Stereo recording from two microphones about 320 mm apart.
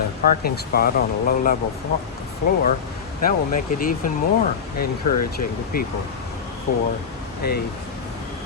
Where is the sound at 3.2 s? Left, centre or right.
Left.